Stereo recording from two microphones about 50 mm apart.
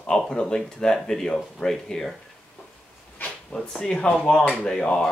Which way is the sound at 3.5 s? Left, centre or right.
Left.